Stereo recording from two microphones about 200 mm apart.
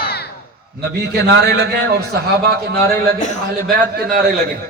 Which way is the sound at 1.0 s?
55° right (ahead or behind).